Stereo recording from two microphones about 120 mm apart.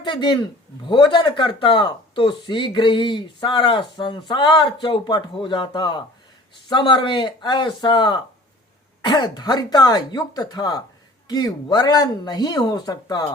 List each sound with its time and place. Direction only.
0.0 s speech: 40° left (ahead or behind)